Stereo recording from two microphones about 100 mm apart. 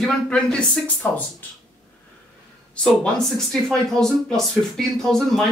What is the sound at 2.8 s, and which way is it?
Speech, 5° left (ahead or behind).